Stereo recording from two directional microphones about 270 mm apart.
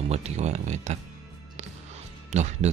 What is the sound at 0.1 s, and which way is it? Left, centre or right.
Speech, right.